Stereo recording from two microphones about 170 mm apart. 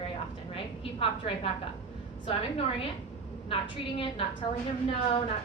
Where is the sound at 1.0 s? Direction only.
30° left (ahead or behind).